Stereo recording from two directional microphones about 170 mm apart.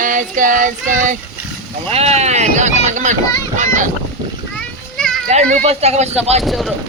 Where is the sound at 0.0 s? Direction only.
50° right (ahead or behind).